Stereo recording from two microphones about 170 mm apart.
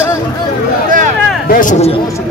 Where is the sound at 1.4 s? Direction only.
60° left (ahead or behind).